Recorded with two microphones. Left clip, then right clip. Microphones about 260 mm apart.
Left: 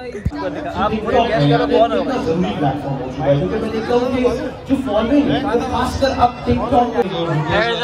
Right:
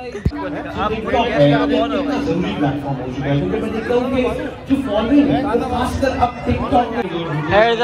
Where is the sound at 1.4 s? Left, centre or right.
Right.